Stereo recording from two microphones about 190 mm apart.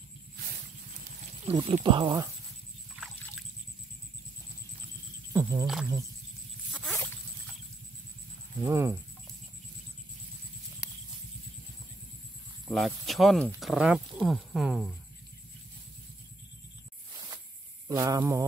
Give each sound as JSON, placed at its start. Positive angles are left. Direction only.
{"t": 1.0, "sound": "horse", "side_deg": -35}
{"t": 1.5, "sound": "speech", "side_deg": -25}
{"t": 5.3, "sound": "a sound", "side_deg": -15}
{"t": 6.7, "sound": "a sound", "side_deg": 0}
{"t": 8.6, "sound": "speech", "side_deg": -15}
{"t": 12.6, "sound": "speech", "side_deg": 0}
{"t": 17.8, "sound": "speech", "side_deg": -20}